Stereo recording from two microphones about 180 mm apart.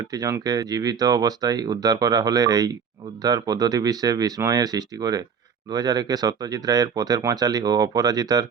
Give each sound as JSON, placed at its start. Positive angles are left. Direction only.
{"t": 0.0, "sound": "speech", "side_deg": -20}